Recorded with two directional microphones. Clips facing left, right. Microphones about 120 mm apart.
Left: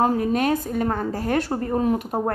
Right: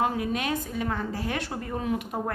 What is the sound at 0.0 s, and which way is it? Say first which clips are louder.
A woman's voice: left 7 dB; 40° left (ahead or behind).